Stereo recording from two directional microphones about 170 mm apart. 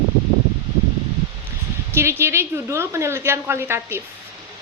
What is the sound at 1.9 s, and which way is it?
Speech, 15° right (ahead or behind).